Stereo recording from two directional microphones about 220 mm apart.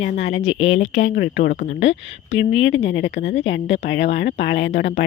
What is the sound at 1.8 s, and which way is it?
Speech, 55° left (ahead or behind).